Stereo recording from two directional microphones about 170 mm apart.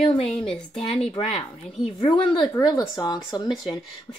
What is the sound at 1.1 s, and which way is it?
Speech, 30° left (ahead or behind).